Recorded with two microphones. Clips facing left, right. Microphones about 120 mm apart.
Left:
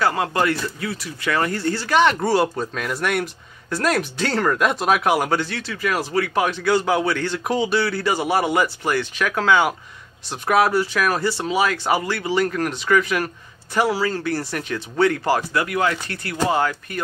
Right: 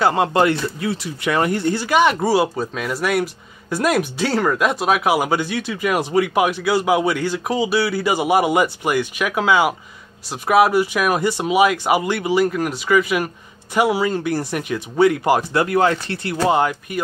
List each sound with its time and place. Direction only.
0.0 s speech: 25° right (ahead or behind)
15.5 s speech: 30° right (ahead or behind)